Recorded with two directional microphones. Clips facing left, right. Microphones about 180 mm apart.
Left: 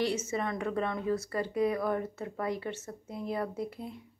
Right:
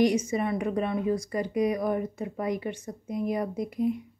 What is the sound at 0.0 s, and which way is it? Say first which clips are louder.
A woman's voice: right 7 dB; 15° right (ahead or behind).